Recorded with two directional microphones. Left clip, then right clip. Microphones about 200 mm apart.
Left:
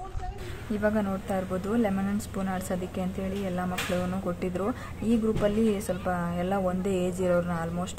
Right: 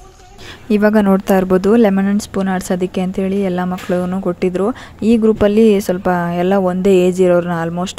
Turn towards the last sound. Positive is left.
turn(degrees=-45)  # may be behind; listen again after turning